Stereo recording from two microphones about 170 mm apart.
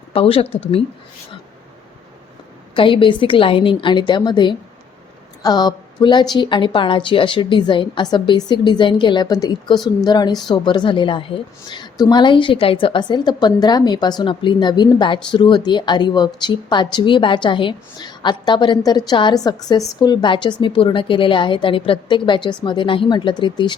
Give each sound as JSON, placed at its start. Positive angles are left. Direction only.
{"t": 0.1, "sound": "speech", "side_deg": 35}
{"t": 2.7, "sound": "speech", "side_deg": 30}